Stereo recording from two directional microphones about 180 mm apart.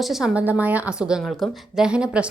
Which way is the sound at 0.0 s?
Centre (ahead or behind).